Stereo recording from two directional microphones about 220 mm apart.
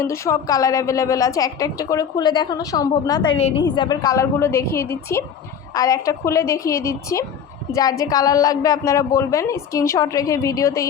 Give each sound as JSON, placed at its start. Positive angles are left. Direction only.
{"t": 0.0, "sound": "a woman's voice", "side_deg": 15}